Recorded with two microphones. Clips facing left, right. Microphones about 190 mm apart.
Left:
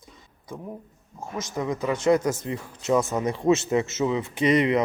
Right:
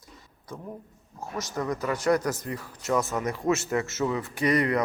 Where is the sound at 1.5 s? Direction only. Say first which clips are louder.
Left 3 dB; 20° left (ahead or behind).